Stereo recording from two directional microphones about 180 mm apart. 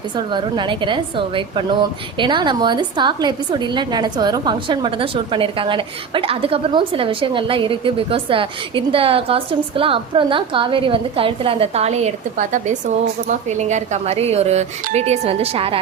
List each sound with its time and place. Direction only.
0.2 s a woman's voice: 25° right (ahead or behind)